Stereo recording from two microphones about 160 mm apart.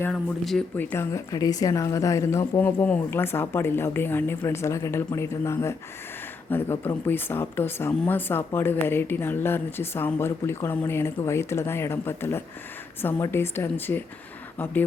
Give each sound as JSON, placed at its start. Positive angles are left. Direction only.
{"t": 0.1, "sound": "speech", "side_deg": 5}